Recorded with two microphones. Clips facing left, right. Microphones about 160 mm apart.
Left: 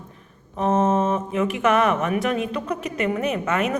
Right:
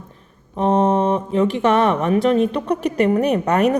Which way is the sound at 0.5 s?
30° right (ahead or behind).